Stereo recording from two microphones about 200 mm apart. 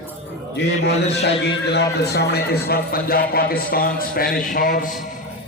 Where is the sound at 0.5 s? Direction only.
60° left (ahead or behind).